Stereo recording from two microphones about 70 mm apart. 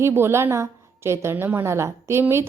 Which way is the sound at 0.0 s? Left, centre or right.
Right.